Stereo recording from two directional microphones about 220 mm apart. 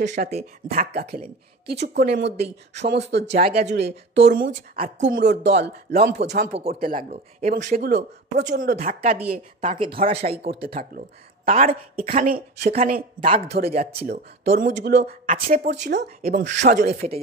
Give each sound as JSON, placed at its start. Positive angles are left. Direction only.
{"t": 0.0, "sound": "speech", "side_deg": -50}
{"t": 3.3, "sound": "speech", "side_deg": -30}
{"t": 3.5, "sound": "speech", "side_deg": -45}
{"t": 9.6, "sound": "speech", "side_deg": -25}
{"t": 10.4, "sound": "speech", "side_deg": -45}
{"t": 13.7, "sound": "speech", "side_deg": -30}
{"t": 14.4, "sound": "speech", "side_deg": -45}